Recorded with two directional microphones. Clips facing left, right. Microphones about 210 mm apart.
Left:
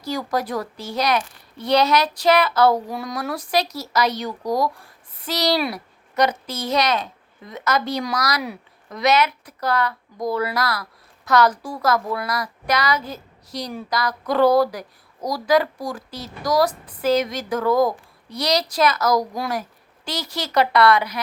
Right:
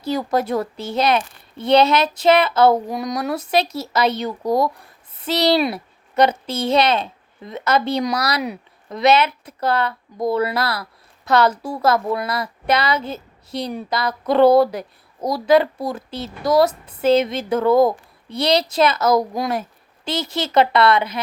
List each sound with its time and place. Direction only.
0.0 s a woman's voice: 25° right (ahead or behind)